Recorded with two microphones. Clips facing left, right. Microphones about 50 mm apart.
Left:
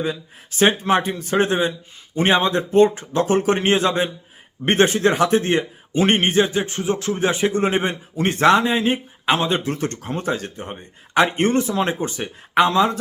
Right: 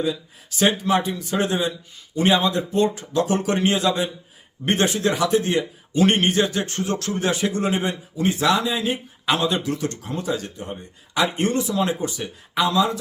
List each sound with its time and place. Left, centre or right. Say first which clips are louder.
0.0 s speech: even; left
8.2 s speech: left 4 dB; left